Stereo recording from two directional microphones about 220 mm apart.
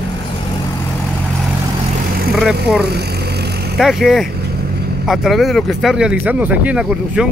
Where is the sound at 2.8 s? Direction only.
45° right (ahead or behind).